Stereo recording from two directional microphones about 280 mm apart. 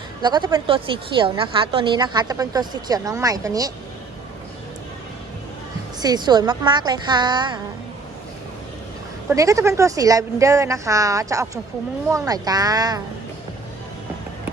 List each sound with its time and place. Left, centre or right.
0.2 s a woman's voice: centre
6.0 s a woman's voice: centre
9.3 s a woman's voice: centre